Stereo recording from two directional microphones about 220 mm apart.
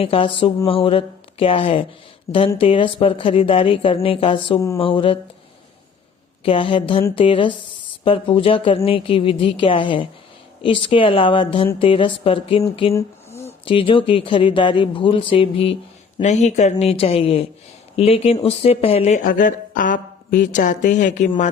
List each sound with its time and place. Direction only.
0.0 s speech: 25° left (ahead or behind)
6.4 s speech: 25° left (ahead or behind)
12.9 s a sound: 15° left (ahead or behind)
13.4 s speech: 25° left (ahead or behind)